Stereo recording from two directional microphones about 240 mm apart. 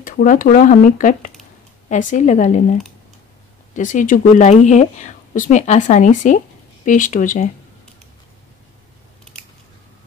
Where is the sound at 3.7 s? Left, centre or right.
Left.